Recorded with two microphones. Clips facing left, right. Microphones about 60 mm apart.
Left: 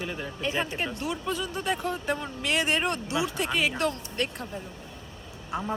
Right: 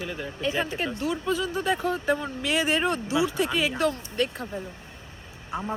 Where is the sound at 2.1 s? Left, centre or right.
Centre.